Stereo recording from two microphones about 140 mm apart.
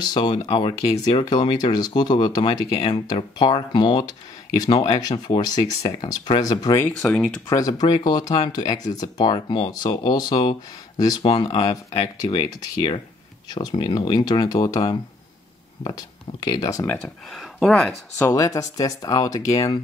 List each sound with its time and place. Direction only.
0.0 s speech: 30° left (ahead or behind)
4.7 s speech: 45° left (ahead or behind)
5.1 s speech: 35° left (ahead or behind)
6.8 s speech: 5° left (ahead or behind)
7.4 s speech: 25° left (ahead or behind)
11.5 s speech: 50° left (ahead or behind); by 17.0 s 20° left (ahead or behind)
17.0 s speech: centre (ahead or behind)
18.1 s speech: 25° left (ahead or behind)